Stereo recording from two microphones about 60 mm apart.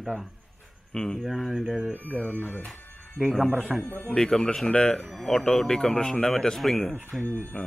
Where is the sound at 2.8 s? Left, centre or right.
Left.